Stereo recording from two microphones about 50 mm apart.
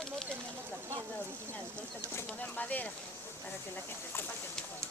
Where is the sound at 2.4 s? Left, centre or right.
Left.